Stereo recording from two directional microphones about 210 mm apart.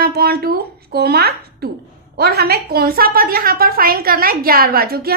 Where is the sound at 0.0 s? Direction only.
50° right (ahead or behind).